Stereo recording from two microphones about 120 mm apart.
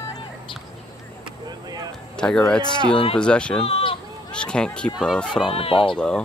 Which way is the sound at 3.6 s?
50° left (ahead or behind).